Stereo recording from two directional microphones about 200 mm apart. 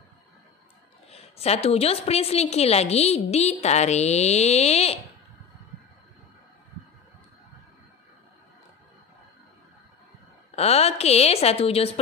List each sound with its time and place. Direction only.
1.1 s a woman's voice: 30° left (ahead or behind)
10.5 s a woman's voice: 30° left (ahead or behind)